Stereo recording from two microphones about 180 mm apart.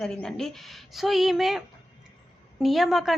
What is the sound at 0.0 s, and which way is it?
A woman's voice, 5° left (ahead or behind).